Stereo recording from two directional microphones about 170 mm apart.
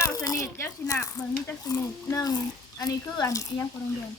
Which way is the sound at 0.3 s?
15° left (ahead or behind).